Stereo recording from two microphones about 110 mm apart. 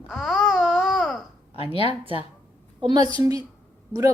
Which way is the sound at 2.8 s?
45° right (ahead or behind).